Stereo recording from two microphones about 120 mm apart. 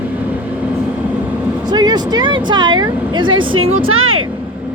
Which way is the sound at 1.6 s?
35° right (ahead or behind).